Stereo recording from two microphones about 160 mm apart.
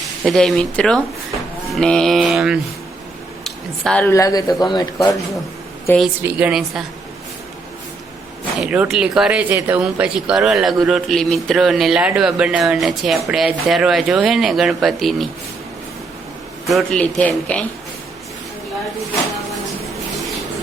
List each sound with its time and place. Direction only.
0.3 s a man's voice: centre (ahead or behind)
4.1 s speech: 20° left (ahead or behind)
6.2 s a man's voice: 5° right (ahead or behind)
8.5 s a man's voice: 5° right (ahead or behind)
16.6 s a man's voice: 5° left (ahead or behind)